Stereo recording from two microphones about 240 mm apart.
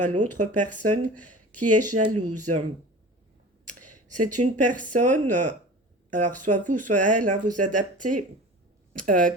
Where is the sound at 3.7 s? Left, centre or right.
Right.